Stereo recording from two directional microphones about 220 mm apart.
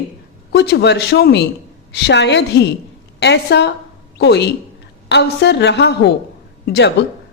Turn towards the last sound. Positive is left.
turn(degrees=50)  # may be behind; listen again after turning